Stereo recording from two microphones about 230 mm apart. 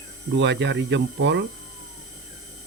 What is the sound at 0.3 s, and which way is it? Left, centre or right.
Speech, right.